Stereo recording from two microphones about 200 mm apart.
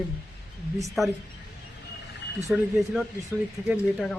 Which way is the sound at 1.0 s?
Centre (ahead or behind).